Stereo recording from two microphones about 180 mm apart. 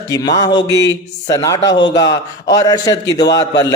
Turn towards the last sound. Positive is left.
turn(degrees=20)  # may be behind; listen again after turning